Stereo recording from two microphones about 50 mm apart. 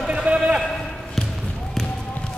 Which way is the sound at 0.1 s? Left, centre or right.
Right.